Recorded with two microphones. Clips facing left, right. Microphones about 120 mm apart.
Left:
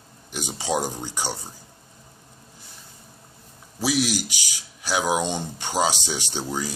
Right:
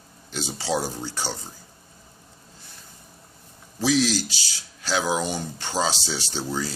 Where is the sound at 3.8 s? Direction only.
10° left (ahead or behind).